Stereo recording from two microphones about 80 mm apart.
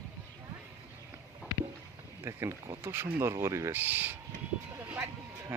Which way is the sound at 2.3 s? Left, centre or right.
Right.